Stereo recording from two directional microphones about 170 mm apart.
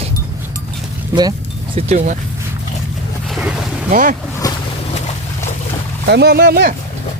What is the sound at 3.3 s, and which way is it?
Boat, 5° right (ahead or behind).